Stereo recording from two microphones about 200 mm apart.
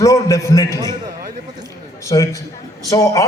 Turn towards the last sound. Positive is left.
turn(degrees=15)  # may be behind; listen again after turning